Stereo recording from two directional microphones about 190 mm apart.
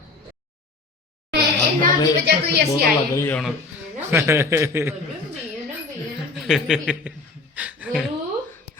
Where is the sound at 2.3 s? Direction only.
60° right (ahead or behind).